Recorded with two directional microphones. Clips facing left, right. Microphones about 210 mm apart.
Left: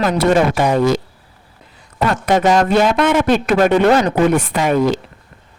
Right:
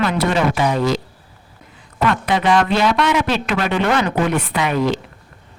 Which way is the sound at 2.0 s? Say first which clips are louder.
Left 3 dB; 45° left (ahead or behind).